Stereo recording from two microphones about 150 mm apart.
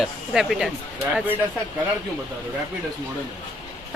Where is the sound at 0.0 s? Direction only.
5° right (ahead or behind).